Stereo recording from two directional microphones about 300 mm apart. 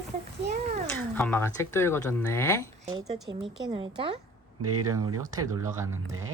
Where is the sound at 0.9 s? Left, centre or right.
Centre.